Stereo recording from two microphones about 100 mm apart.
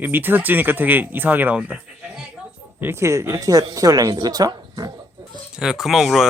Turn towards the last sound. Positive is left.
turn(degrees=0)  # may be behind; listen again after turning